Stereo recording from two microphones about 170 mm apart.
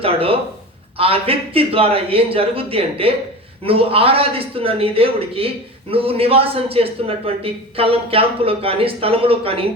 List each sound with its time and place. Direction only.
0.0 s a man's voice: 35° right (ahead or behind)